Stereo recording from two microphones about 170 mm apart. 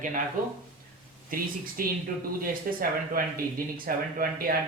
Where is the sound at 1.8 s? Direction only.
55° right (ahead or behind).